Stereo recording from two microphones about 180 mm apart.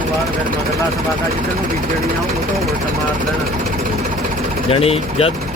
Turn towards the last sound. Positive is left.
turn(degrees=35)  # may be behind; listen again after turning